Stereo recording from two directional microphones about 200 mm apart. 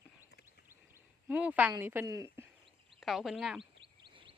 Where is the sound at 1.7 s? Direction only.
10° right (ahead or behind).